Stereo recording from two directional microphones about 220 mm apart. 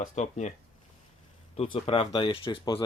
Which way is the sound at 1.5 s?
25° left (ahead or behind).